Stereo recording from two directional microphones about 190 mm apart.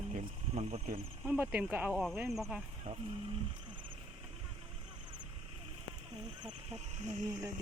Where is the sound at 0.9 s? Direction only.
10° right (ahead or behind).